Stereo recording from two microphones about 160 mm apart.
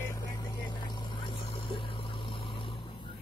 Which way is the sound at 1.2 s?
35° left (ahead or behind).